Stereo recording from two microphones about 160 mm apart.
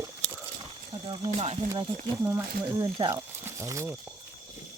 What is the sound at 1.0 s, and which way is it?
Speech, 40° right (ahead or behind).